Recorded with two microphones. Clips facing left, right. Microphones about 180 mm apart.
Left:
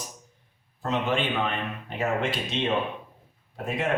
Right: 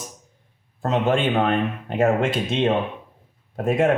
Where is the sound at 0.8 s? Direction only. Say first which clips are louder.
Right 6 dB; 50° right (ahead or behind).